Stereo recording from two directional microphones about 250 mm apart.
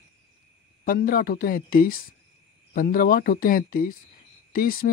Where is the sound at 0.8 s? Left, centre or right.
Left.